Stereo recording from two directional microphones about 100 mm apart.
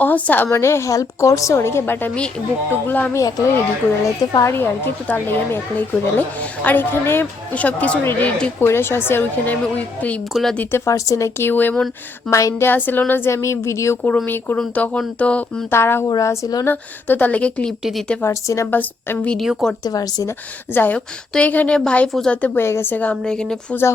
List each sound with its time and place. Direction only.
0.0 s a woman's voice: 15° left (ahead or behind)
3.2 s speech: 35° left (ahead or behind); by 8.5 s 15° left (ahead or behind)
8.6 s speech: 25° left (ahead or behind)
11.3 s speech: 20° left (ahead or behind)
12.3 s a woman's voice: 30° left (ahead or behind); by 15.6 s 10° left (ahead or behind)
15.7 s speech: 25° left (ahead or behind)
16.0 s speech: 35° left (ahead or behind)
16.6 s a woman's voice: 20° left (ahead or behind)
18.2 s speech: 25° left (ahead or behind)
19.5 s speech: centre (ahead or behind)
19.8 s speech: 40° left (ahead or behind)
20.7 s a woman's voice: 15° left (ahead or behind)
22.4 s a woman's voice: 20° left (ahead or behind)